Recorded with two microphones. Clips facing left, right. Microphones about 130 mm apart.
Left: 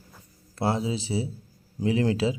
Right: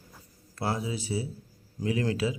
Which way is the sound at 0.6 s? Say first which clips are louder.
Left 5 dB; 25° left (ahead or behind).